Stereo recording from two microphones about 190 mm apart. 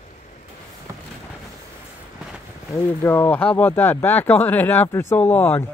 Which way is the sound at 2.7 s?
10° left (ahead or behind).